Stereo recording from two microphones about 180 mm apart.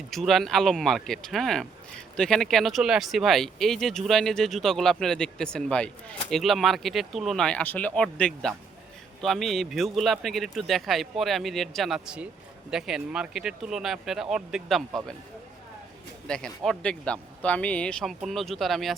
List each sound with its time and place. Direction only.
0.1 s speech: centre (ahead or behind)
16.2 s speech: 5° left (ahead or behind)